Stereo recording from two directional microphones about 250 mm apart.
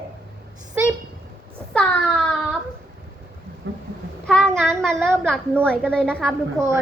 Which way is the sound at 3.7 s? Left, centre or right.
Right.